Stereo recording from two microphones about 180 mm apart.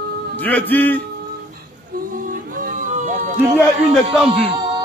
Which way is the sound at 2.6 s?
45° right (ahead or behind).